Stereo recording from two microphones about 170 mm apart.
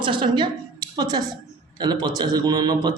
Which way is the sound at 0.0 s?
30° right (ahead or behind).